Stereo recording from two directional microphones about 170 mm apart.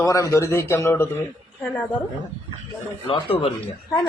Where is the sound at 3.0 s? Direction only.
30° left (ahead or behind).